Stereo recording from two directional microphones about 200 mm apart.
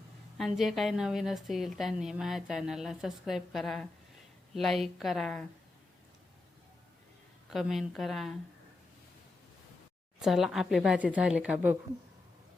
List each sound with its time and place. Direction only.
0.3 s a woman's voice: centre (ahead or behind)
7.5 s a woman's voice: centre (ahead or behind)
10.2 s a woman's voice: centre (ahead or behind)